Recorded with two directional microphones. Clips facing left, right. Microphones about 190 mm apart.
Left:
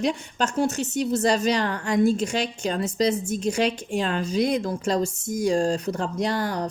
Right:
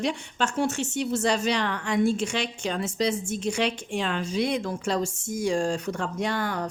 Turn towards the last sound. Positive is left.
turn(degrees=35)  # may be behind; listen again after turning